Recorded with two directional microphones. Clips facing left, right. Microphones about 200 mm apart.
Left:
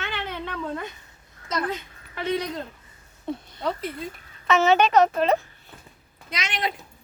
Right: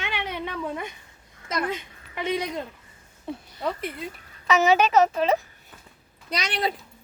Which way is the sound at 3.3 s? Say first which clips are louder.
Left 1 dB; 5° right (ahead or behind).